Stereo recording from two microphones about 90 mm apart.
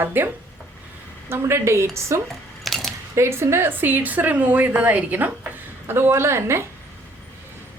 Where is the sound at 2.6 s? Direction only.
5° left (ahead or behind).